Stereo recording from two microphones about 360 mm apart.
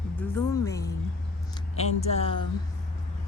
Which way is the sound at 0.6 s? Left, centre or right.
Centre.